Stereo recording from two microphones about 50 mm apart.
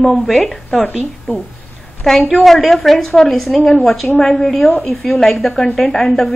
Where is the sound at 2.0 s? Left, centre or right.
Centre.